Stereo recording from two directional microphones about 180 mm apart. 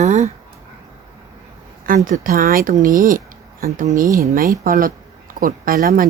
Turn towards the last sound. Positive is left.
turn(degrees=-50)  # may be behind; listen again after turning